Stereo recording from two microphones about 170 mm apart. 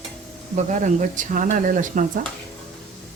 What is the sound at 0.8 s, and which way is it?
Speech, 50° right (ahead or behind).